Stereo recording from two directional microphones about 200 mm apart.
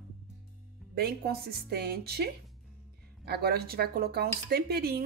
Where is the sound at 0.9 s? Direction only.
50° right (ahead or behind).